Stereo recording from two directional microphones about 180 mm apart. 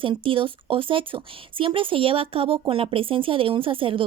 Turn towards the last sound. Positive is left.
turn(degrees=-30)  # may be behind; listen again after turning